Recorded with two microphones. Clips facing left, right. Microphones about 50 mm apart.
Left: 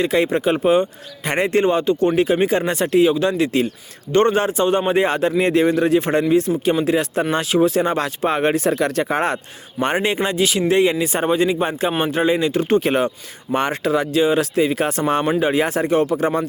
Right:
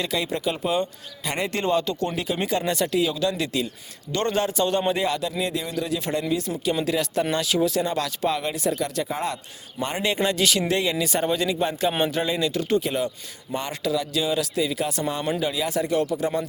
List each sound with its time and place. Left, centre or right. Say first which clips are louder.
0.0 s speech: left 8 dB; left
10.0 s speech: left 4 dB; left
12.8 s speech: left 7 dB; left